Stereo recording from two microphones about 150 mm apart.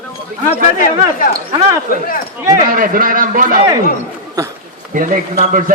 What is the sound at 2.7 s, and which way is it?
Speech, 70° right (ahead or behind).